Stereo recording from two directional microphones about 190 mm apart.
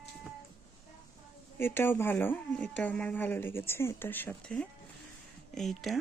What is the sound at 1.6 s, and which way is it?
Speech, 10° left (ahead or behind).